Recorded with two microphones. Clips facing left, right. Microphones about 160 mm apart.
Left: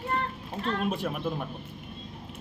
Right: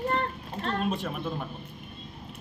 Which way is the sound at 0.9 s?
10° left (ahead or behind).